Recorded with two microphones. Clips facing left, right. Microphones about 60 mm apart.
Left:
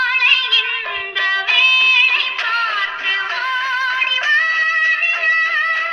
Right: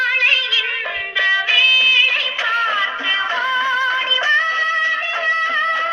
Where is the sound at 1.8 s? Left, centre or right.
Left.